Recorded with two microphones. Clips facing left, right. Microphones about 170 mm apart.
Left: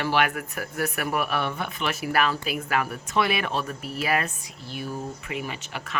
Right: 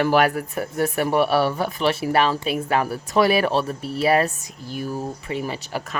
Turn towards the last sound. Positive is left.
turn(degrees=-40)  # may be behind; listen again after turning